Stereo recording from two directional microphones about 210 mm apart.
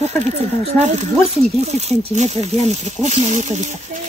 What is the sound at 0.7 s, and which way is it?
Speech, 30° right (ahead or behind).